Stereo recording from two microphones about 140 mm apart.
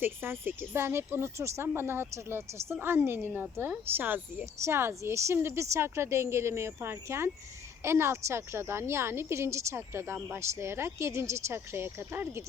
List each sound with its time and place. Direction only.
0.0 s a woman's voice: 15° right (ahead or behind)